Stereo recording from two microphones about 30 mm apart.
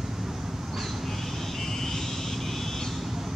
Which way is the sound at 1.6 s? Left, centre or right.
Centre.